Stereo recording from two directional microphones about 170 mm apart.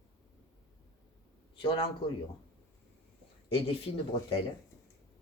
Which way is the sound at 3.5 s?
35° left (ahead or behind).